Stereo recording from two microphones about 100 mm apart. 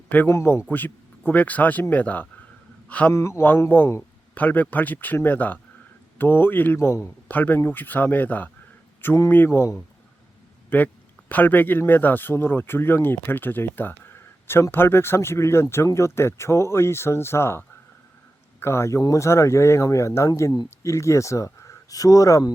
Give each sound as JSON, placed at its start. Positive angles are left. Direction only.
{"t": 0.1, "sound": "a man's voice", "side_deg": 25}
{"t": 3.1, "sound": "a man's voice", "side_deg": 30}